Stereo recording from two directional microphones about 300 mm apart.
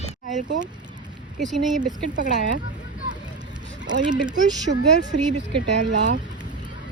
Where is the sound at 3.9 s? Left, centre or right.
Right.